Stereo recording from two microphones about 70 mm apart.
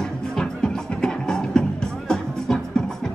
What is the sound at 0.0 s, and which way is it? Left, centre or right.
Music, centre.